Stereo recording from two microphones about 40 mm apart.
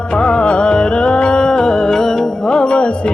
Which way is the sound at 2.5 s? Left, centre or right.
Left.